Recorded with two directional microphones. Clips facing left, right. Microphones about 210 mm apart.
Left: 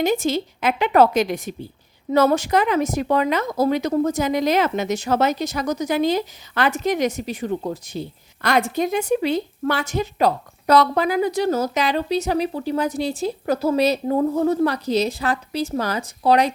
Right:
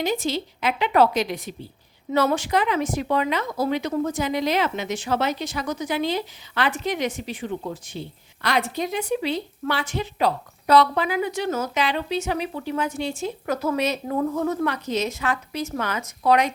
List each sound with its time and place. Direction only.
0.0 s a woman's voice: 50° left (ahead or behind); by 16.5 s 35° left (ahead or behind)